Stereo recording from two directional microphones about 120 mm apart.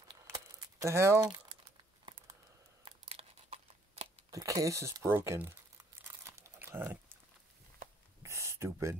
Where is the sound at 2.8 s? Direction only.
55° right (ahead or behind).